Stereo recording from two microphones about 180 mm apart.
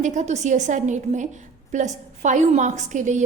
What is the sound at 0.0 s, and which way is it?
A woman's voice, 40° right (ahead or behind).